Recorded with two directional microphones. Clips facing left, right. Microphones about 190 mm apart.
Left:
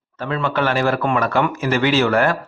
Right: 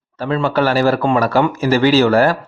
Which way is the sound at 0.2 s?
30° right (ahead or behind).